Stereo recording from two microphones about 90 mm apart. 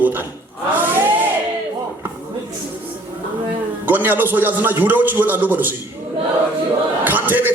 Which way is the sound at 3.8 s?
20° right (ahead or behind).